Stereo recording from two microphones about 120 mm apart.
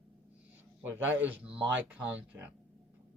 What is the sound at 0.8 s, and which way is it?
A man's voice, 15° right (ahead or behind).